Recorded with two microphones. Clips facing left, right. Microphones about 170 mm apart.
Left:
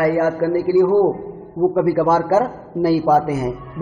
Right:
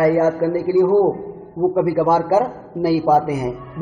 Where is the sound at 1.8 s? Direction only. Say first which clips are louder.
Even; 15° right (ahead or behind).